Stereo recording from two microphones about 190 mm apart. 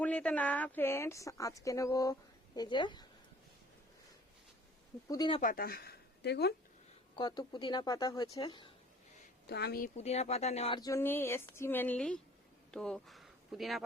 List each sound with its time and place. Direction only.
0.0 s a woman's voice: 5° left (ahead or behind); by 3.1 s 25° left (ahead or behind)
5.0 s speech: 20° left (ahead or behind)
5.4 s speech: 50° left (ahead or behind)
7.2 s speech: 25° left (ahead or behind)
9.5 s a woman's voice: 60° left (ahead or behind)
9.9 s speech: 35° left (ahead or behind)
10.8 s a woman's voice: 15° left (ahead or behind); by 13.8 s centre (ahead or behind)